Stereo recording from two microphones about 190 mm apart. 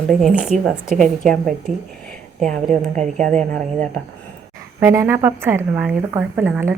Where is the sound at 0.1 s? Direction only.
Centre (ahead or behind).